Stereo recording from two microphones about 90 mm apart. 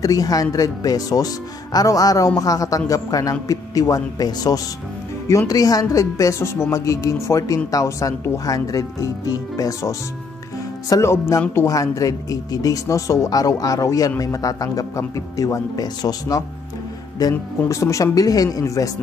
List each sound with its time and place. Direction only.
0.0 s speech: 40° left (ahead or behind)